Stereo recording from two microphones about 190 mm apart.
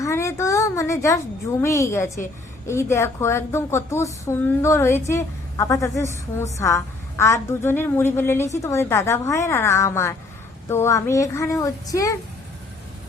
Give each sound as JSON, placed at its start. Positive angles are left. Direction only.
{"t": 0.0, "sound": "a woman's voice", "side_deg": 15}